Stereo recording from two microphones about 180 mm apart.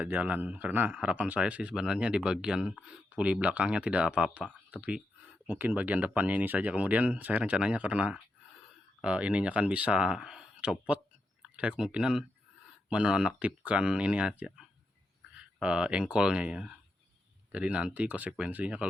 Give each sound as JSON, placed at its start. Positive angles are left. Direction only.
{"t": 0.0, "sound": "speech", "side_deg": -10}